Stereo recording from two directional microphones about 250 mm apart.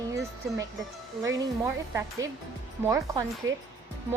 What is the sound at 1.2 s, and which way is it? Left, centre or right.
A woman's voice, centre.